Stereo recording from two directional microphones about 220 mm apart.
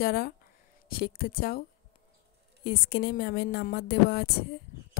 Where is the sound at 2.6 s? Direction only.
45° left (ahead or behind).